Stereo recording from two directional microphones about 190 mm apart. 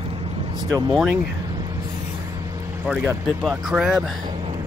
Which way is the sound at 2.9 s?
5° right (ahead or behind).